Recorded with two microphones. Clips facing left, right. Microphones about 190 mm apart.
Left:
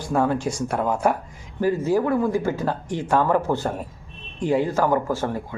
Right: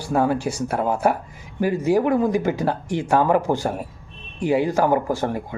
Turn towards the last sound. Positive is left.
turn(degrees=-15)  # may be behind; listen again after turning